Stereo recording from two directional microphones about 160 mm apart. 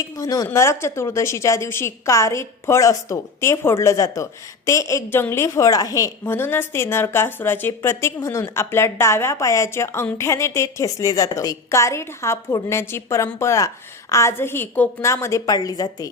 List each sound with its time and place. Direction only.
0.0 s a woman's voice: 20° left (ahead or behind)